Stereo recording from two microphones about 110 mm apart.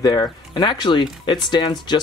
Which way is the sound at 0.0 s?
35° left (ahead or behind).